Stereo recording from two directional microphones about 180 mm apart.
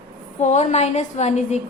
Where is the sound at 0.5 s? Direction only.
40° left (ahead or behind).